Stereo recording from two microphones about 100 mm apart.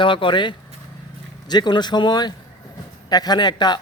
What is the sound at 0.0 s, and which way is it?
A man's voice, 55° left (ahead or behind).